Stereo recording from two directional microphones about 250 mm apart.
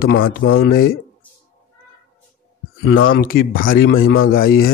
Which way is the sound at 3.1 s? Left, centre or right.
Left.